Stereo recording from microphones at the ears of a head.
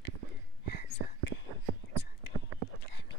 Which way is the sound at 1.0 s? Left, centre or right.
Right.